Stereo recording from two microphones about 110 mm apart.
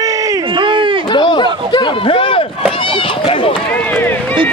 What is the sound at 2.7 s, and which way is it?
Run, 50° left (ahead or behind).